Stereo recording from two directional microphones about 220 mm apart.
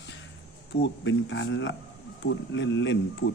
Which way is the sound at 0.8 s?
55° left (ahead or behind).